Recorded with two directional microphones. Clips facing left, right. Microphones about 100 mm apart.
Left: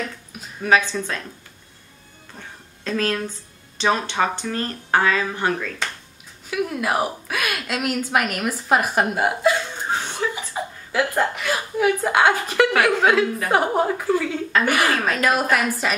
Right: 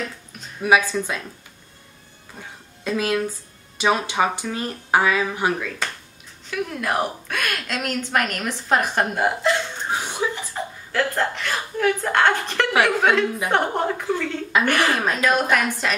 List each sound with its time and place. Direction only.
0.6 s speech: 10° right (ahead or behind)
2.8 s a woman's voice: 10° right (ahead or behind)
6.5 s a woman's voice: 5° left (ahead or behind)
9.9 s chuckle: 15° right (ahead or behind)
10.3 s a woman's voice: 10° left (ahead or behind)
15.0 s speech: 15° right (ahead or behind)
15.5 s a woman's voice: 5° left (ahead or behind)